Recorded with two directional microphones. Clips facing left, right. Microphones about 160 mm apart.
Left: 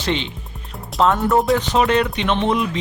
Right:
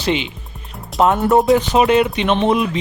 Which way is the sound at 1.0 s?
20° right (ahead or behind).